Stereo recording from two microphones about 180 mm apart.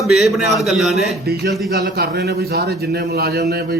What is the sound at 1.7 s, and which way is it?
A man's voice, 60° right (ahead or behind).